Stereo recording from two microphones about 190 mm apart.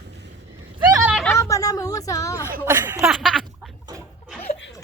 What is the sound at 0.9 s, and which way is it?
Vehicle, 15° right (ahead or behind).